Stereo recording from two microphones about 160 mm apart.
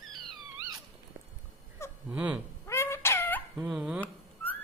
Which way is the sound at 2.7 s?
15° left (ahead or behind).